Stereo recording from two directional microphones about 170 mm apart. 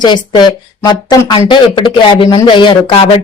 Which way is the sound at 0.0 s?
25° left (ahead or behind).